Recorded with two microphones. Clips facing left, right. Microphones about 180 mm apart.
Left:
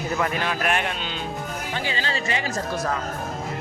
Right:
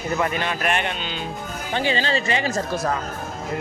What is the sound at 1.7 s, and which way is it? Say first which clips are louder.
Speech: right 8 dB; 25° right (ahead or behind).